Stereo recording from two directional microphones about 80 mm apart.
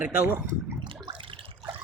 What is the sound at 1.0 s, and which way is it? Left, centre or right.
Water, right.